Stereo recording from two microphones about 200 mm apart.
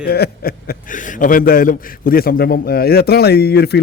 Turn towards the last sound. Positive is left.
turn(degrees=55)  # may be behind; listen again after turning